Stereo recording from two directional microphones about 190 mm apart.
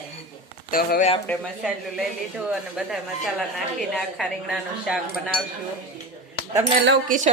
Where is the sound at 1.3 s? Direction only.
10° left (ahead or behind).